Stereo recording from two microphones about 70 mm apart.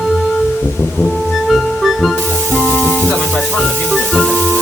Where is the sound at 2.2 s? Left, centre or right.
Centre.